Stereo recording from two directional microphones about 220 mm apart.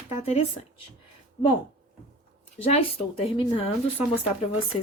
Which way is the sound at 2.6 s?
25° left (ahead or behind).